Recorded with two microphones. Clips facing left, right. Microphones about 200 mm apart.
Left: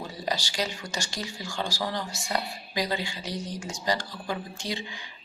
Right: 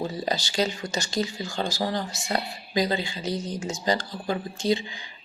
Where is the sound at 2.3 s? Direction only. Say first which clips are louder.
Right 4 dB; 25° right (ahead or behind).